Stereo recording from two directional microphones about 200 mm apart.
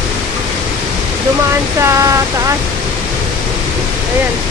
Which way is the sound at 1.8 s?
15° right (ahead or behind).